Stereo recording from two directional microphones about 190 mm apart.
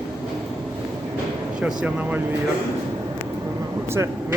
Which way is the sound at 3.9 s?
15° right (ahead or behind).